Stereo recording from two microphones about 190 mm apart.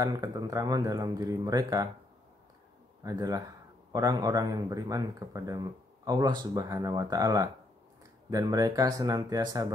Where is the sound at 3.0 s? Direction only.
20° right (ahead or behind).